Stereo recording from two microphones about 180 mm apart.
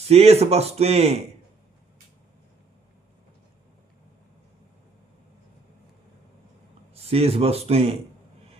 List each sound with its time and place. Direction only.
0.1 s a man's voice: 35° right (ahead or behind)
6.9 s a man's voice: 35° right (ahead or behind)